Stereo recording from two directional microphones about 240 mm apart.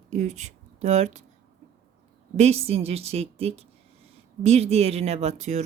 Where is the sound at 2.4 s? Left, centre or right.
Right.